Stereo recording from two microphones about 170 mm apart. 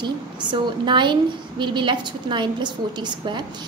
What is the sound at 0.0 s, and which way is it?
A woman's voice, 25° right (ahead or behind).